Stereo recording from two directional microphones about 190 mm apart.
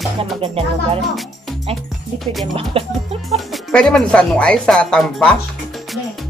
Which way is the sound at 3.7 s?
5° left (ahead or behind).